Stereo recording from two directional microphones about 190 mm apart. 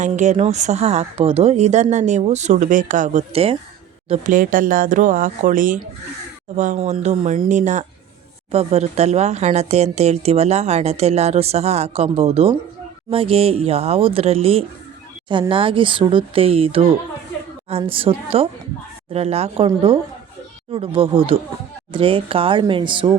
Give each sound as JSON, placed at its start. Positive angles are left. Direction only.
{"t": 0.0, "sound": "speech", "side_deg": -40}
{"t": 4.1, "sound": "speech", "side_deg": -45}